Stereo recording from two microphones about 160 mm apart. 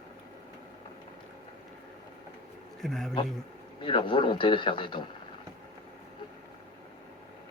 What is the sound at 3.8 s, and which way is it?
Speech, 30° left (ahead or behind).